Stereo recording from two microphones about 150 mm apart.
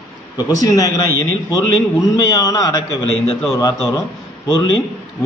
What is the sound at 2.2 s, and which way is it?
A man's voice, 25° left (ahead or behind).